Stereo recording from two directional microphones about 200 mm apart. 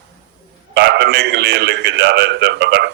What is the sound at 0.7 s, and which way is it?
A man's voice, 60° right (ahead or behind).